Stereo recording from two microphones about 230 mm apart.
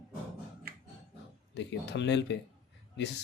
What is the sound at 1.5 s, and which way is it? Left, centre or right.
Speech, left.